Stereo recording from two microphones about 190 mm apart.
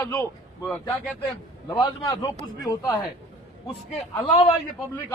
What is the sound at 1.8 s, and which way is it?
A man's voice, 20° left (ahead or behind).